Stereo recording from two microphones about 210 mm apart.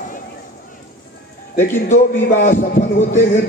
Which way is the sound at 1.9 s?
40° left (ahead or behind).